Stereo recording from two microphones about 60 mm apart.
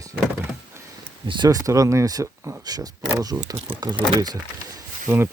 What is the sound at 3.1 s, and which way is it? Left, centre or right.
Speech, right.